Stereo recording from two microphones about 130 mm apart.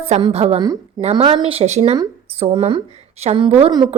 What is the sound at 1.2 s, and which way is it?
A woman's voice, 40° right (ahead or behind).